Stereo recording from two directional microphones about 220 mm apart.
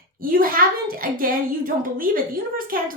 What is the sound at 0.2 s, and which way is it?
A child's voice, 40° right (ahead or behind).